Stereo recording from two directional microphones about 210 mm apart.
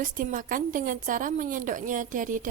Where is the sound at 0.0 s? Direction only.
40° right (ahead or behind).